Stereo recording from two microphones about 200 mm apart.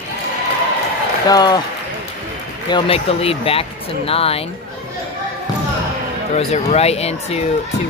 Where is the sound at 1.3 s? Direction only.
20° left (ahead or behind).